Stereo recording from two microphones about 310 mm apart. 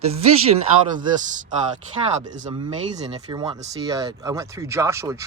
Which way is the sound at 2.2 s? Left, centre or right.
Centre.